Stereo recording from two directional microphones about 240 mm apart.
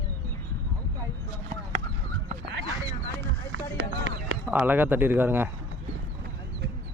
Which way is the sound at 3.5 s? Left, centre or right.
Right.